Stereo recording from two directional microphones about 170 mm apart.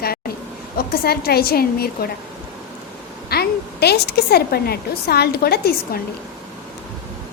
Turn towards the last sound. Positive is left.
turn(degrees=65)  # may be behind; listen again after turning